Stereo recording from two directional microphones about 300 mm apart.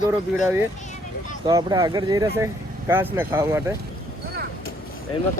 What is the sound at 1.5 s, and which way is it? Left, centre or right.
Speech, centre.